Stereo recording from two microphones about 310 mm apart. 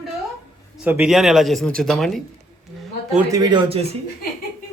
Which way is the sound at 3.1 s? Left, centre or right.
Centre.